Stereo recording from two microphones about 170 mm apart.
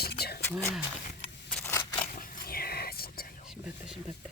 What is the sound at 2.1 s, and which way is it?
Whispering, 55° left (ahead or behind).